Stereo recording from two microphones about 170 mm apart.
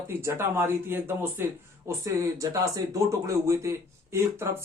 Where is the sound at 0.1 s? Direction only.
15° right (ahead or behind).